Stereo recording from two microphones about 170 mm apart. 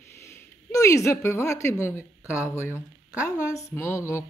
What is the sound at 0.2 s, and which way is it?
Speech, 15° left (ahead or behind).